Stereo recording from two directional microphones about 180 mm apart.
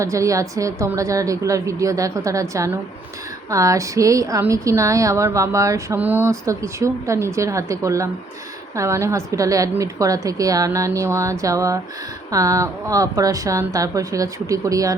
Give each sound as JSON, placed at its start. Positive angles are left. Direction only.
{"t": 0.0, "sound": "a woman's voice", "side_deg": -15}